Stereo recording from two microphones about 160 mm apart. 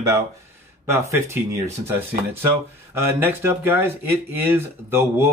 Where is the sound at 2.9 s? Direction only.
15° right (ahead or behind).